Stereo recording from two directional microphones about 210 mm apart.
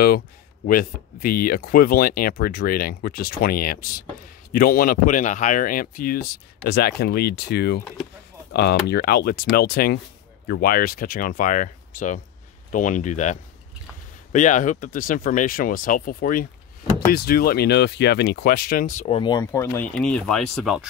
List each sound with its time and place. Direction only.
0.7 s speech: 45° left (ahead or behind); by 20.9 s centre (ahead or behind)